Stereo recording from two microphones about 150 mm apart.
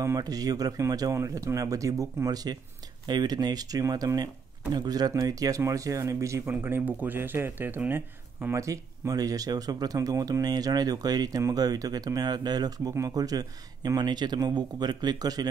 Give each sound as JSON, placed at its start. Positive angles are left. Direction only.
{"t": 0.0, "sound": "speech", "side_deg": -25}